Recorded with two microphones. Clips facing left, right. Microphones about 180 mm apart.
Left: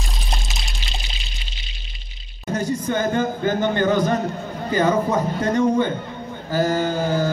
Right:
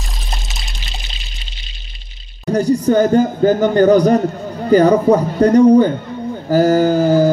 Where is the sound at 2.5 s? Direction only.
40° right (ahead or behind).